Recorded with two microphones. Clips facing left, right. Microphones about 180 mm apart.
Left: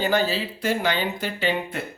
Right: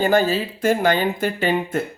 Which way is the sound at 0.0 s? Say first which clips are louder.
Right 5 dB; 50° right (ahead or behind).